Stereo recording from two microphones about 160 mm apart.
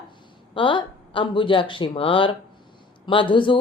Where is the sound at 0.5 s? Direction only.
30° left (ahead or behind).